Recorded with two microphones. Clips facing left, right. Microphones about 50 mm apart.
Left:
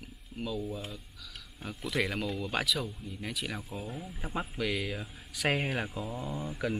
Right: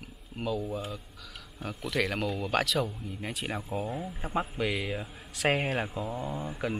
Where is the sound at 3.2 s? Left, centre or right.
Right.